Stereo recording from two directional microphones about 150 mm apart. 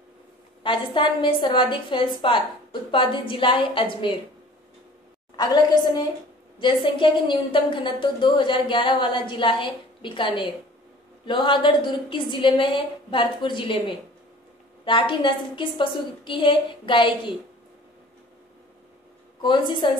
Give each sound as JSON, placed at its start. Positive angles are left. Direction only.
{"t": 0.7, "sound": "a woman's voice", "side_deg": 35}
{"t": 5.3, "sound": "a woman's voice", "side_deg": 30}
{"t": 19.4, "sound": "a woman's voice", "side_deg": 30}